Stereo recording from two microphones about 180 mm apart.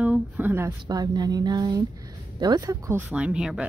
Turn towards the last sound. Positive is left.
turn(degrees=-5)  # may be behind; listen again after turning